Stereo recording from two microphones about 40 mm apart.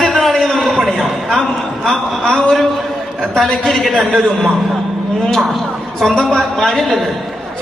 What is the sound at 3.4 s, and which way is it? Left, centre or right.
Speech, centre.